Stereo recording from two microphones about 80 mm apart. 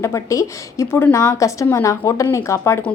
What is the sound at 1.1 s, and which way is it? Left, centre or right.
Speech, left.